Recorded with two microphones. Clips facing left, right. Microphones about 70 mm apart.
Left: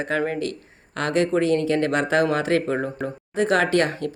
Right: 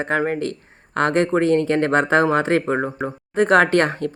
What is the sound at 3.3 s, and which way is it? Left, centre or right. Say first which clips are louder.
Speech: right 4 dB; right.